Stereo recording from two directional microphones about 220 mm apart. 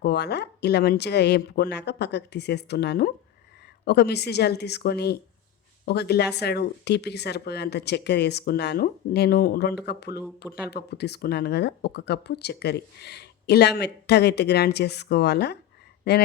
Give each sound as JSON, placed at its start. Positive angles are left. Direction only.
{"t": 0.0, "sound": "speech", "side_deg": 50}